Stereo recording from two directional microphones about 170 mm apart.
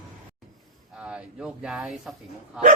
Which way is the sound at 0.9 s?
5° right (ahead or behind).